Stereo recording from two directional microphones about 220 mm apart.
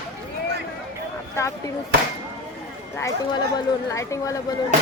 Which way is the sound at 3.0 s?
15° left (ahead or behind).